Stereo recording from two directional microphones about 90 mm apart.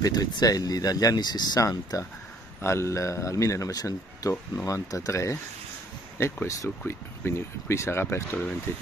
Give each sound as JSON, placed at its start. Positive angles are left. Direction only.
{"t": 0.0, "sound": "speech", "side_deg": 45}
{"t": 2.6, "sound": "speech", "side_deg": 30}
{"t": 6.4, "sound": "speech", "side_deg": 35}